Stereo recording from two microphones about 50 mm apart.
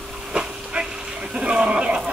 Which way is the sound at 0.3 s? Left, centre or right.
Centre.